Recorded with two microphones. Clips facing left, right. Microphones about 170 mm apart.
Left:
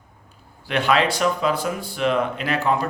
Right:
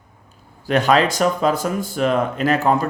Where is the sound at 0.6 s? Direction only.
40° right (ahead or behind).